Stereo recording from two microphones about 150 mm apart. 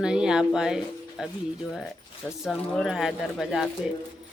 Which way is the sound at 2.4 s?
Centre (ahead or behind).